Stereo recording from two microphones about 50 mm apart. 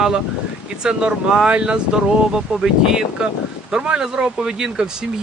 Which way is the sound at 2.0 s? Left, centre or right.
Centre.